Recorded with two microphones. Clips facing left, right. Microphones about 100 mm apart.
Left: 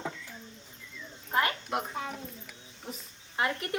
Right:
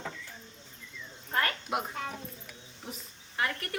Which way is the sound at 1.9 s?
5° left (ahead or behind).